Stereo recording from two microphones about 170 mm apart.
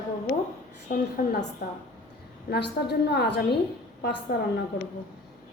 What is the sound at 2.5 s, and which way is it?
A woman's voice, 75° left (ahead or behind).